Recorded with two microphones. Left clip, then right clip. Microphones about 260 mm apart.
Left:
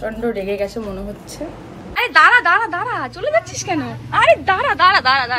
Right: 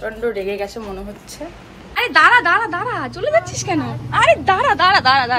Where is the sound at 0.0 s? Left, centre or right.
Centre.